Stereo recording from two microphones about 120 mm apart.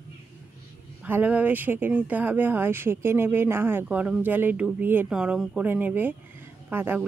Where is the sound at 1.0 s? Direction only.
15° right (ahead or behind).